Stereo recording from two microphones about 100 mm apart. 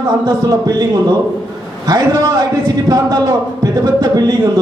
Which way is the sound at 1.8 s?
40° right (ahead or behind).